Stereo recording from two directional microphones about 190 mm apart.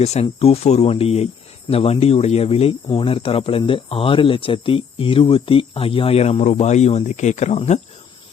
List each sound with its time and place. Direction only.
0.0 s speech: 35° left (ahead or behind)